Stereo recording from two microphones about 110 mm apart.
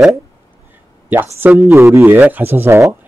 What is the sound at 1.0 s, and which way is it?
A man's voice, 20° right (ahead or behind).